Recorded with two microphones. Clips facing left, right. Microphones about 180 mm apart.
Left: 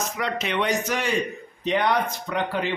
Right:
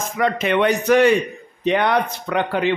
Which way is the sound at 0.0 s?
50° right (ahead or behind).